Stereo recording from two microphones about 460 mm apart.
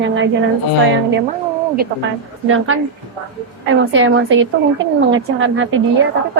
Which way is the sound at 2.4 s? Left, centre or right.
Right.